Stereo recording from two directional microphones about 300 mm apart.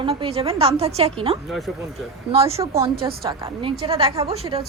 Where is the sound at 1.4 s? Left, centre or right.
Centre.